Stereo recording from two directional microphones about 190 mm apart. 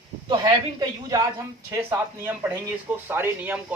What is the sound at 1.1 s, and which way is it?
Speech, 15° right (ahead or behind).